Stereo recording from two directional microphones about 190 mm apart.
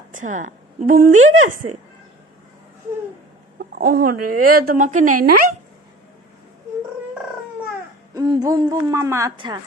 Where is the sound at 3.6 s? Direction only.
50° right (ahead or behind).